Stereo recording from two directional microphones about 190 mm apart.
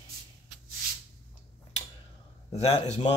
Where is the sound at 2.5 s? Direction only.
30° left (ahead or behind).